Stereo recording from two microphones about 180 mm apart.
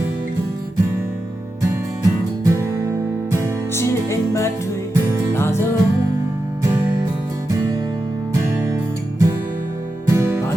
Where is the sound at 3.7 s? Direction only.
15° left (ahead or behind).